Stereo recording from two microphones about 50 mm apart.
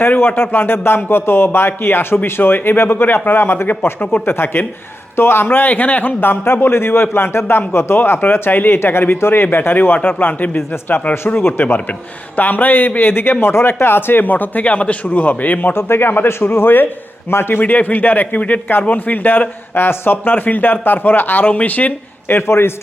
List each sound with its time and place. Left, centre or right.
0.2 s speech: left
8.8 s speech: left
13.4 s speech: left
15.7 s speech: left
17.6 s speech: left
22.3 s a man's voice: left